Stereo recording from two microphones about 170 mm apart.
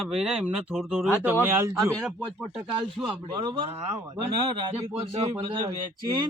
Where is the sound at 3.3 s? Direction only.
25° right (ahead or behind).